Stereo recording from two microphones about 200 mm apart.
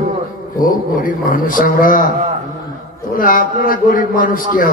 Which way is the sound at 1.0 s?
45° left (ahead or behind).